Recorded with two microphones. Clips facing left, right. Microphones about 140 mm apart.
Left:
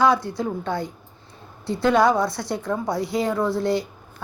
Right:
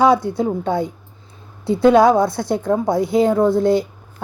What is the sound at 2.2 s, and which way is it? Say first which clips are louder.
Speech: right 7 dB; 55° right (ahead or behind).